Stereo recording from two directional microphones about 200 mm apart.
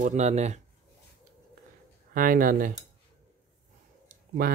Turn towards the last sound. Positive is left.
turn(degrees=-50)  # may be behind; listen again after turning